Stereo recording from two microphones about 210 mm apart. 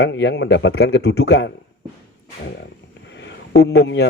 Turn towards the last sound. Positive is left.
turn(degrees=55)  # may be behind; listen again after turning